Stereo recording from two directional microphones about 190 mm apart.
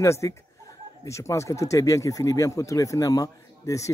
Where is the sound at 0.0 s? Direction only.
15° left (ahead or behind).